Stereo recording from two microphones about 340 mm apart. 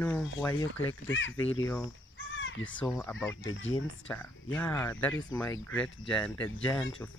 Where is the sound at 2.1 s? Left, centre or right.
Left.